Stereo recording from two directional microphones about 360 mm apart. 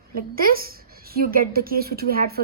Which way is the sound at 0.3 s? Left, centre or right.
Right.